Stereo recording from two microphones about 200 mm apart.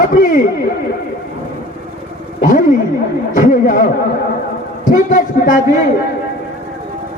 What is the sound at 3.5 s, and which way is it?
Speech, 45° left (ahead or behind).